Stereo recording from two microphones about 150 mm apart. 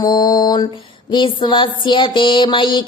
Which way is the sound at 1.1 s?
30° left (ahead or behind).